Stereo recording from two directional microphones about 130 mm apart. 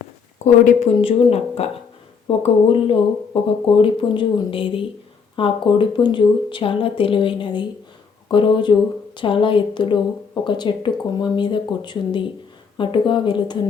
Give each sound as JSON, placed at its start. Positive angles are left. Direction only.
{"t": 0.4, "sound": "speech", "side_deg": 70}
{"t": 1.0, "sound": "speech", "side_deg": 50}